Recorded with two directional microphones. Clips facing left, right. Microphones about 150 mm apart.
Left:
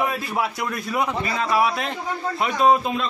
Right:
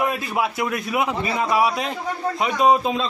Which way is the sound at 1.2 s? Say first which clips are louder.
Right 1 dB; 15° right (ahead or behind).